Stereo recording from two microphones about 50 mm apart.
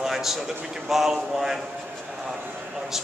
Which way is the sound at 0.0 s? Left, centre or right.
Centre.